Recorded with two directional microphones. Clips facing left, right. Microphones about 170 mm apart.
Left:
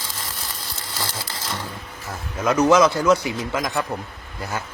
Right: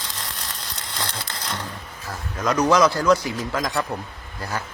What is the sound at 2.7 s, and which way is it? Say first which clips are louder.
Speech: left 1 dB; 20° left (ahead or behind).